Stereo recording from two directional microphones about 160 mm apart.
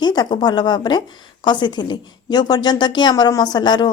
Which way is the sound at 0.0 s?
30° left (ahead or behind).